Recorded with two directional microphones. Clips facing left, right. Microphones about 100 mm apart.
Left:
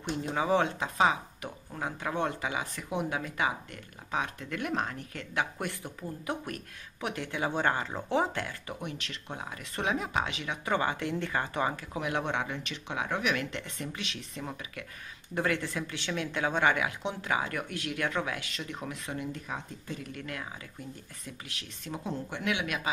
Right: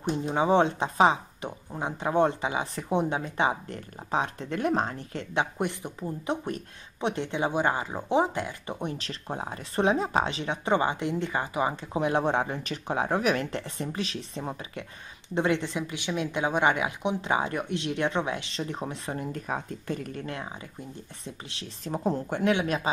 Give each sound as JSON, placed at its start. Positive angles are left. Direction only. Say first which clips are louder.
{"t": 0.1, "sound": "speech", "louder": "right 4 dB", "side_deg": -25}
{"t": 20.2, "sound": "speech", "louder": "right 4 dB", "side_deg": -30}